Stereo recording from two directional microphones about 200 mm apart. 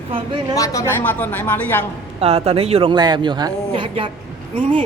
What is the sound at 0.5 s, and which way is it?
A woman's voice, 15° left (ahead or behind).